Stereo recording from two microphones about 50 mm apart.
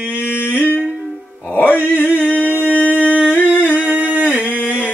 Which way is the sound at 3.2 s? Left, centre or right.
Right.